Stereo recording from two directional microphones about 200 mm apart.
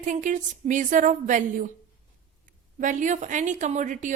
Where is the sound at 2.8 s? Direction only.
40° right (ahead or behind).